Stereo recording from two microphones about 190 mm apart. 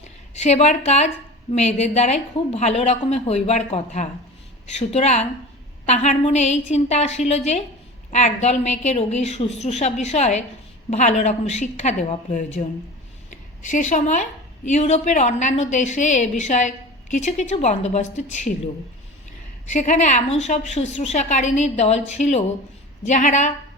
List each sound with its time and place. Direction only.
0.0 s a sound: 35° left (ahead or behind)
0.9 s a woman's voice: 35° left (ahead or behind)
19.7 s a woman's voice: 40° left (ahead or behind)